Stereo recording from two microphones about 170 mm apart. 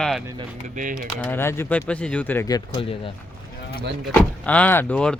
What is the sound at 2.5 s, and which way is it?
Speech, 30° left (ahead or behind).